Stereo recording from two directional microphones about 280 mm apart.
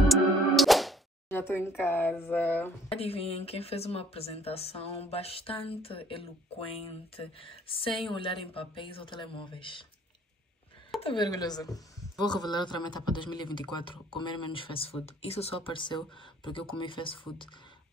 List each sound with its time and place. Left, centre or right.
0.1 s music: centre
1.8 s speech: centre
2.9 s speech: left
11.0 s speech: centre